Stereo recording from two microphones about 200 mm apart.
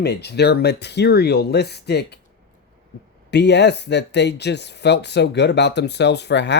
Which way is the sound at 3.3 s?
60° left (ahead or behind).